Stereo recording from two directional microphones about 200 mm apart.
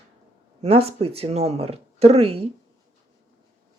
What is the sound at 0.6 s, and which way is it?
Speech, 30° right (ahead or behind).